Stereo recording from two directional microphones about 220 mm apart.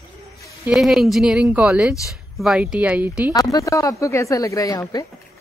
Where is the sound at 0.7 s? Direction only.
Centre (ahead or behind).